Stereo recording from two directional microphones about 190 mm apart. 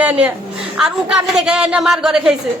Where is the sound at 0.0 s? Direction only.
10° right (ahead or behind).